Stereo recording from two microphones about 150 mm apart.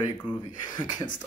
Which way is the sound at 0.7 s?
25° left (ahead or behind).